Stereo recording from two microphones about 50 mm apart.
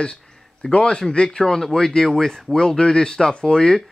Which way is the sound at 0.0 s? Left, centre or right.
Centre.